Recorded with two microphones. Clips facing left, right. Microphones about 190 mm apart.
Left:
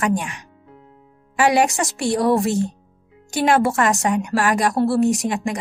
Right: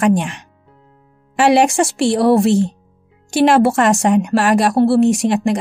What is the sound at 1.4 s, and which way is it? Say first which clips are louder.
A woman's voice: right 5 dB; 30° right (ahead or behind).